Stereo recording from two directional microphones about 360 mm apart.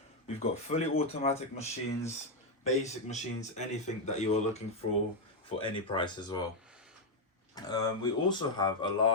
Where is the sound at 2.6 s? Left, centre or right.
Centre.